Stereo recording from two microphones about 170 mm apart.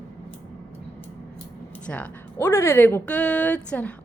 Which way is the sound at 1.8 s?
10° left (ahead or behind).